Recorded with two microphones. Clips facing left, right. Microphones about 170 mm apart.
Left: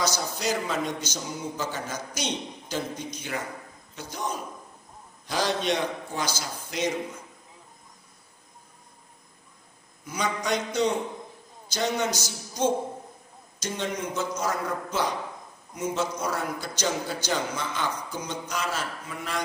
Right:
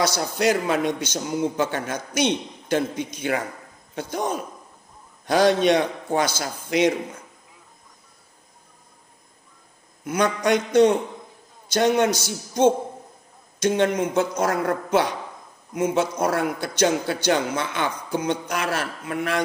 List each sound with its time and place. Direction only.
0.1 s a man's voice: 60° right (ahead or behind)
3.9 s a man's voice: 55° right (ahead or behind)
10.0 s a man's voice: 65° right (ahead or behind)